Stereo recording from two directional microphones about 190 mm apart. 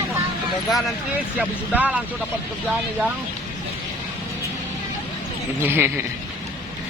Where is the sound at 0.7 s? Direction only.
5° right (ahead or behind).